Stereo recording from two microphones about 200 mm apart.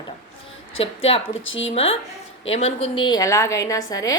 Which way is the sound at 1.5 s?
70° left (ahead or behind).